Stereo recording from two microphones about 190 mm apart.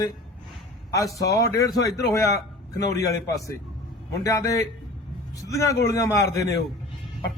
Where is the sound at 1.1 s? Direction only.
15° left (ahead or behind).